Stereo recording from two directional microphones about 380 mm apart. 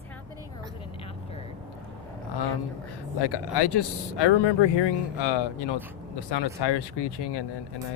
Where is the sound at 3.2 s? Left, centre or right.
Left.